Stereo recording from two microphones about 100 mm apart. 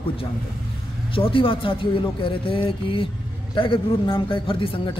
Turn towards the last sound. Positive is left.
turn(degrees=60)  # may be behind; listen again after turning